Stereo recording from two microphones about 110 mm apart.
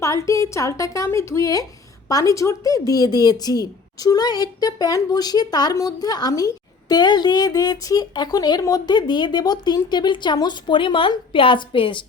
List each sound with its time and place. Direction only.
0.0 s a woman's voice: 30° left (ahead or behind); by 12.0 s 50° left (ahead or behind)